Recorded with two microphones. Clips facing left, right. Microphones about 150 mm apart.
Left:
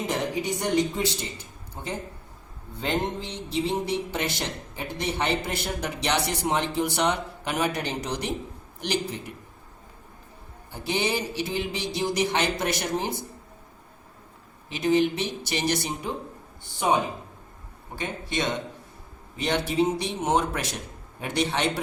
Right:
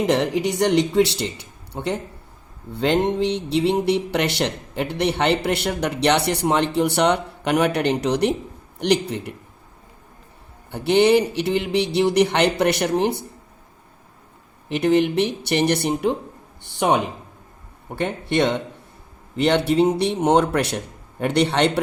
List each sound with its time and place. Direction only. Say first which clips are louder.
0.0 s speech: right 8 dB; 70° right (ahead or behind)
10.7 s speech: right 12 dB; 65° right (ahead or behind)
14.7 s speech: right 4 dB; 60° right (ahead or behind)